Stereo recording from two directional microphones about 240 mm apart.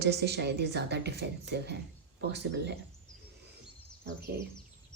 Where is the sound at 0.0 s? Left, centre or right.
Right.